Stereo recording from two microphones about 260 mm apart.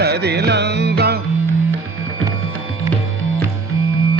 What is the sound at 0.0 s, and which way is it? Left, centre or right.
Music, right.